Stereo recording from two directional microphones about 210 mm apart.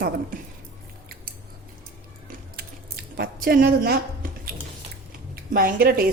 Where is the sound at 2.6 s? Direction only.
45° right (ahead or behind).